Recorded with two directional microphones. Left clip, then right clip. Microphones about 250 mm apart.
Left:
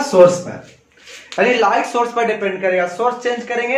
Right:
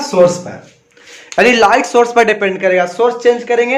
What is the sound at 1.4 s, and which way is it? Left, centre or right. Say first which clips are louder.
Speech: right 5 dB; right.